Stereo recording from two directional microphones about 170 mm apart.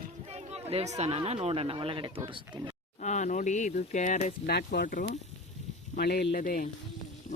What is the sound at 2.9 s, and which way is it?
Speech, 45° left (ahead or behind).